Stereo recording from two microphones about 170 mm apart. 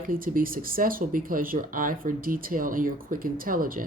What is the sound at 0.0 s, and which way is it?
Speech, 55° right (ahead or behind).